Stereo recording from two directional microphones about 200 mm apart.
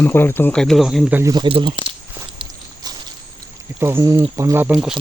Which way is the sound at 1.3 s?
25° right (ahead or behind).